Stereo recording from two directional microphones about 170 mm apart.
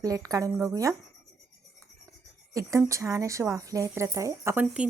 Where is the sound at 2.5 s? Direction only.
20° right (ahead or behind).